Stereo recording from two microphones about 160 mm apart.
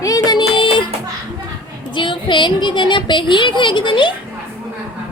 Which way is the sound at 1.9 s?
30° left (ahead or behind).